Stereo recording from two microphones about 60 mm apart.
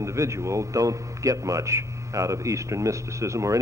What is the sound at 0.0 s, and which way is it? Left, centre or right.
A man's voice, right.